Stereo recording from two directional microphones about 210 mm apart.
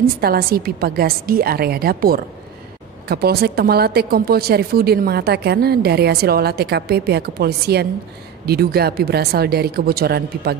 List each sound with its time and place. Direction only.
0.0 s speech: 45° right (ahead or behind)